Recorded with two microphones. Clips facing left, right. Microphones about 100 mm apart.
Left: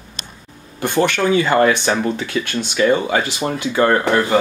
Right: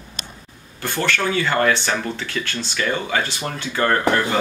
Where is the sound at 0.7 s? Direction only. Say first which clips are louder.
Left 6 dB; 20° left (ahead or behind).